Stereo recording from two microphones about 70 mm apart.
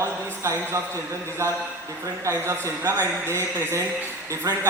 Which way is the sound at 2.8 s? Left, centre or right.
Right.